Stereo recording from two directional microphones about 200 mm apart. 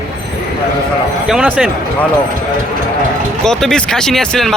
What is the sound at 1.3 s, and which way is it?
Speech, 5° right (ahead or behind).